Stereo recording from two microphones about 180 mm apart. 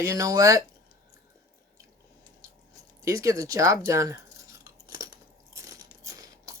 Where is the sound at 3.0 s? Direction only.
20° right (ahead or behind).